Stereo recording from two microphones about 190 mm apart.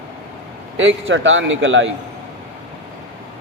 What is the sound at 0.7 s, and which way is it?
A man's voice, 80° right.